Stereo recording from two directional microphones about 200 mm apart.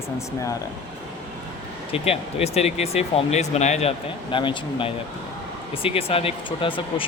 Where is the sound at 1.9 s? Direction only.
30° left (ahead or behind).